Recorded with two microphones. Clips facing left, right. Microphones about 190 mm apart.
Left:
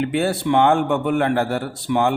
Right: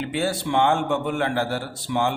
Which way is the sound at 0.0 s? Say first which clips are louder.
Left 5 dB; 60° left (ahead or behind).